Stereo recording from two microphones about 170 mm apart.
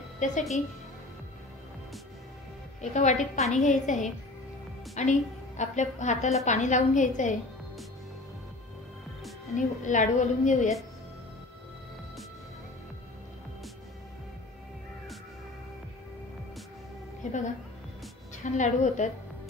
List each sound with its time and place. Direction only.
0.2 s a woman's voice: 45° left (ahead or behind)
2.8 s a woman's voice: 45° left (ahead or behind)
9.6 s a woman's voice: 45° left (ahead or behind)
18.4 s a woman's voice: 45° left (ahead or behind)